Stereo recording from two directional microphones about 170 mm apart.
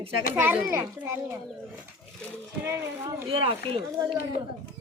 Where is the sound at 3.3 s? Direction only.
35° right (ahead or behind).